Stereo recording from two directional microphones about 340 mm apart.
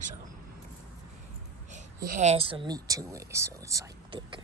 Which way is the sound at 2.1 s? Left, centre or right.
Centre.